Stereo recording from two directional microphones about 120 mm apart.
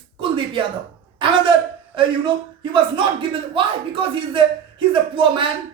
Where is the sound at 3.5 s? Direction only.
45° right (ahead or behind).